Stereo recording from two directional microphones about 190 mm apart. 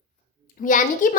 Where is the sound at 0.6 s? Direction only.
45° left (ahead or behind).